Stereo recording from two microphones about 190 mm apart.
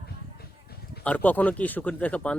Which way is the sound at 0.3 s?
55° left (ahead or behind).